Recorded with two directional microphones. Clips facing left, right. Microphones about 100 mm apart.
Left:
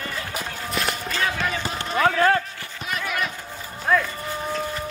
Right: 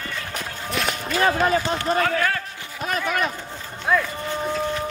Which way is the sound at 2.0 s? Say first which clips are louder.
Left 4 dB; 30° left (ahead or behind).